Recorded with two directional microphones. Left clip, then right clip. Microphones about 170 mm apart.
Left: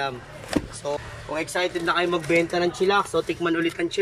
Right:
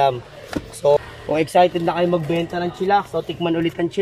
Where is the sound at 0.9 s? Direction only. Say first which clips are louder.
Right 7 dB; 60° right (ahead or behind).